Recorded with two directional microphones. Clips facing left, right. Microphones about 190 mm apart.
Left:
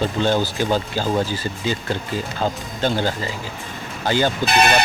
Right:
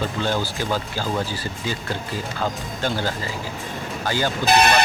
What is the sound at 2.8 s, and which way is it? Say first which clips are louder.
Speech: left 4 dB; 20° left (ahead or behind).